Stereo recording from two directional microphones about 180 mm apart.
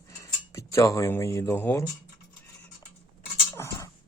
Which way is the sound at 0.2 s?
15° left (ahead or behind).